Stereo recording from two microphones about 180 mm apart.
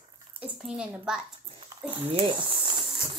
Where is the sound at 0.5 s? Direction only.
Centre (ahead or behind).